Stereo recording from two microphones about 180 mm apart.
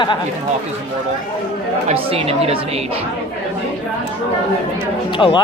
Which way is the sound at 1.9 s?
35° right (ahead or behind).